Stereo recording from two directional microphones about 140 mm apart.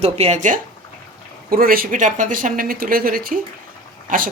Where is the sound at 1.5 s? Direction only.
90° right.